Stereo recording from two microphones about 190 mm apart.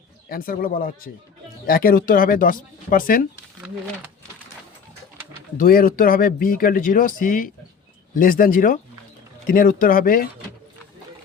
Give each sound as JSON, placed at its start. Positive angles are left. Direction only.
{"t": 0.3, "sound": "speech", "side_deg": 50}
{"t": 5.5, "sound": "speech", "side_deg": 50}